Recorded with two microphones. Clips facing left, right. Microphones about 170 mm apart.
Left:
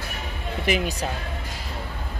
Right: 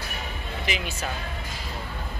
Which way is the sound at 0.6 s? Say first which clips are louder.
Left 8 dB; 50° left (ahead or behind).